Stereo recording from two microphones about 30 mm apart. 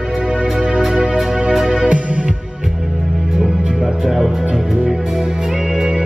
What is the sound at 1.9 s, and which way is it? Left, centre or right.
Music, right.